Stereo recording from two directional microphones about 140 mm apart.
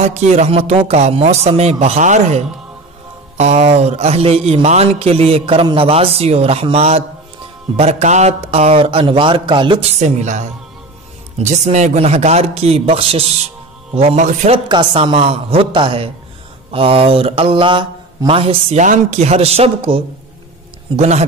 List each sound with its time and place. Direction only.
0.0 s a man's voice: 55° right (ahead or behind)
13.9 s speech: 55° right (ahead or behind)
14.5 s mantra: 35° right (ahead or behind)
18.8 s a man's voice: 60° right (ahead or behind)